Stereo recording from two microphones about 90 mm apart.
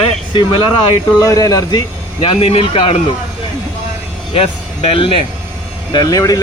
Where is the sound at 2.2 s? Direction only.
90° left.